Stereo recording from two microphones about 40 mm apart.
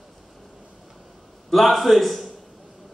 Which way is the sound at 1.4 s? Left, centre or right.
Centre.